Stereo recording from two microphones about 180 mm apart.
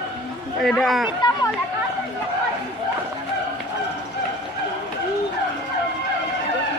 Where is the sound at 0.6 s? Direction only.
Centre (ahead or behind).